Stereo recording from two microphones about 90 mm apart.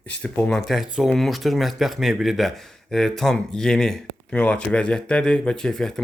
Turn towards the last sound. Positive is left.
turn(degrees=5)  # may be behind; listen again after turning